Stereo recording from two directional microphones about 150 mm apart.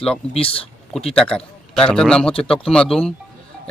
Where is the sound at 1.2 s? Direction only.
5° left (ahead or behind).